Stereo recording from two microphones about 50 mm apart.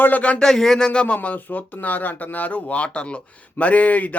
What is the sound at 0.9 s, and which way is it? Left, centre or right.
Speech, left.